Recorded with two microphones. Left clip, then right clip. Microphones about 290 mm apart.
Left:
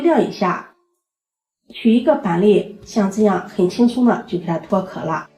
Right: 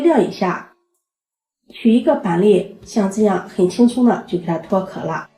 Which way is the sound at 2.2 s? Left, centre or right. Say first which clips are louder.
Right 1 dB; left.